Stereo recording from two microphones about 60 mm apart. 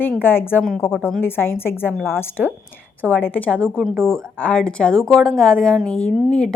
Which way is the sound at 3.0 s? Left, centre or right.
Left.